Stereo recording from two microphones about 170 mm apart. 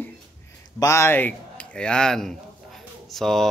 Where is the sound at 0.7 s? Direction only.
15° left (ahead or behind).